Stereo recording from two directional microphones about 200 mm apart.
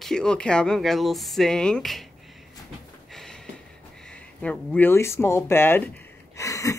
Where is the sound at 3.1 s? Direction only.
Centre (ahead or behind).